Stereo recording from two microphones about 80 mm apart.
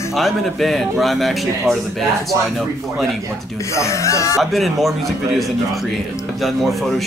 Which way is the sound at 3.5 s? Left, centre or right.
Left.